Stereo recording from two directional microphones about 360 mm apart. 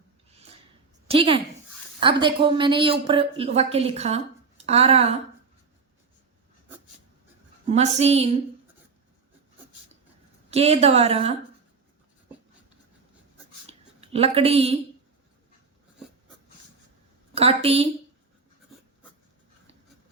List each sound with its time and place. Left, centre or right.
0.3 s a sound: centre
1.0 s a woman's voice: centre
7.7 s a woman's voice: centre
10.5 s a woman's voice: centre
13.7 s a sound: centre
17.3 s a woman's voice: centre